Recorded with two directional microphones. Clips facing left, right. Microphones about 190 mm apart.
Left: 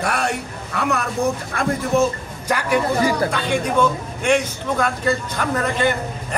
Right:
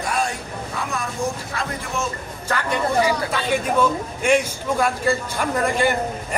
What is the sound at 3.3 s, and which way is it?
A man's voice, 5° right (ahead or behind).